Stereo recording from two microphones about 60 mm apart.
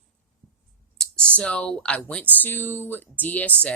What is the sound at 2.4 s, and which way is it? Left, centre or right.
Speech, left.